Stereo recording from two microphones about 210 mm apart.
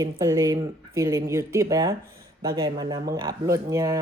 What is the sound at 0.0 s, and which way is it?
A woman's voice, 15° right (ahead or behind).